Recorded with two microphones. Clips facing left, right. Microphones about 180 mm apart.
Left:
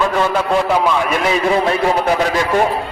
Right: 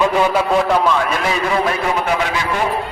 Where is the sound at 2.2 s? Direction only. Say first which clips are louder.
Left 4 dB; 35° left (ahead or behind).